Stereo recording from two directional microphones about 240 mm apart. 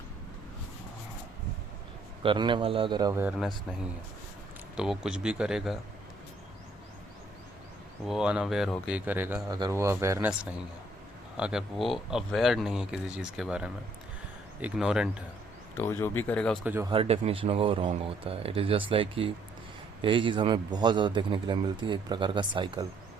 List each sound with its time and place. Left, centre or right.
2.2 s a man's voice: centre
4.8 s speech: centre
8.0 s speech: centre
11.3 s speech: centre
15.8 s speech: centre
16.6 s speech: centre
16.9 s a man's voice: right